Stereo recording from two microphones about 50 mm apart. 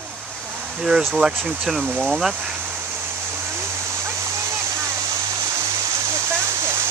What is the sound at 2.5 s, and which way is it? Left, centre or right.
Waterfall, right.